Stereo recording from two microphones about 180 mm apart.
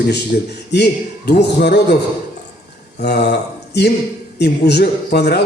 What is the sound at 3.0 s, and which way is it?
A man's voice, 65° left (ahead or behind).